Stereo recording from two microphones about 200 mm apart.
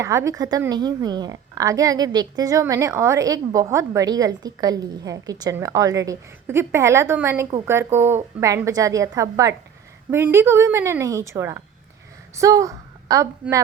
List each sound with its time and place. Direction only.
0.0 s a woman's voice: 15° right (ahead or behind)